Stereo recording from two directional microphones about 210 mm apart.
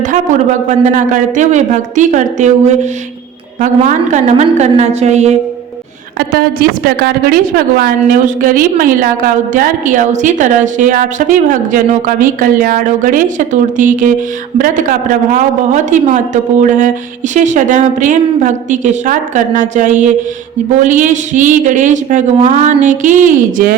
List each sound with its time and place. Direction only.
0.0 s a woman's voice: 35° right (ahead or behind)
6.1 s a woman's voice: 50° right (ahead or behind)